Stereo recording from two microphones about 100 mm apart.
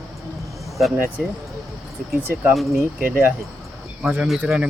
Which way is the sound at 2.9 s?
15° right (ahead or behind).